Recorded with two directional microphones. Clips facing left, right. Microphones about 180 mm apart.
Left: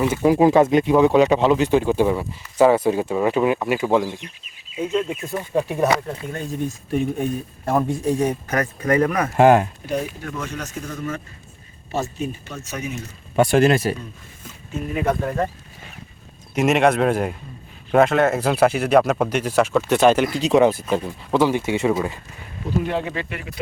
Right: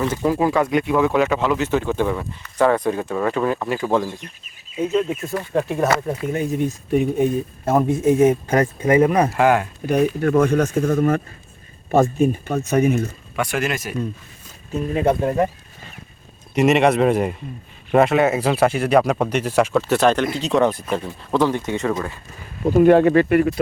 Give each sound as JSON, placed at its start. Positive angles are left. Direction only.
{"t": 0.0, "sound": "speech", "side_deg": 10}
{"t": 0.3, "sound": "speech", "side_deg": 20}
{"t": 4.2, "sound": "speech", "side_deg": -45}
{"t": 4.8, "sound": "speech", "side_deg": -5}
{"t": 5.2, "sound": "speech", "side_deg": 15}
{"t": 6.1, "sound": "speech", "side_deg": -15}
{"t": 9.8, "sound": "speech", "side_deg": -60}
{"t": 13.3, "sound": "speech", "side_deg": 30}
{"t": 14.9, "sound": "speech", "side_deg": -25}
{"t": 16.6, "sound": "speech", "side_deg": 0}
{"t": 22.7, "sound": "speech", "side_deg": -55}